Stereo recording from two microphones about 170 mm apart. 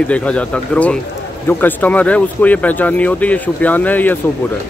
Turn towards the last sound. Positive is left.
turn(degrees=10)  # may be behind; listen again after turning